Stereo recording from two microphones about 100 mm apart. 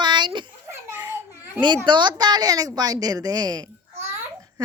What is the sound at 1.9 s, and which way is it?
A woman's voice, 50° right (ahead or behind).